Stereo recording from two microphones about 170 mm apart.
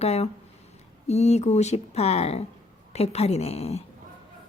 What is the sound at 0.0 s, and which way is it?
A woman's voice, 40° left (ahead or behind).